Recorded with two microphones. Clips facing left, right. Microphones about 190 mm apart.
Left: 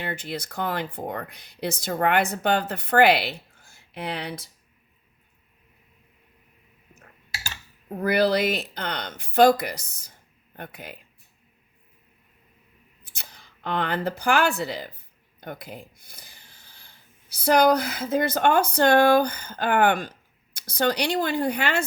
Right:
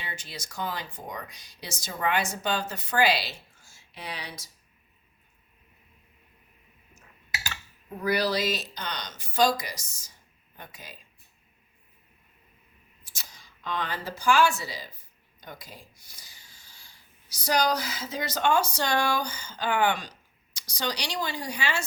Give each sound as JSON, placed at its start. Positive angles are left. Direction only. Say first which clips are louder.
{"t": 0.0, "sound": "speech", "louder": "left 10 dB", "side_deg": 55}
{"t": 8.0, "sound": "speech", "louder": "left 5 dB", "side_deg": 55}
{"t": 13.0, "sound": "speech", "louder": "left 3 dB", "side_deg": 60}